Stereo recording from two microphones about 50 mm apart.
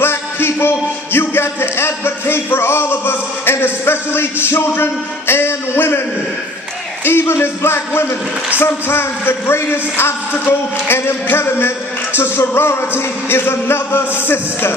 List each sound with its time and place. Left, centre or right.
0.0 s a man's voice: left
7.1 s speech: left
12.2 s music: left
13.3 s speech: left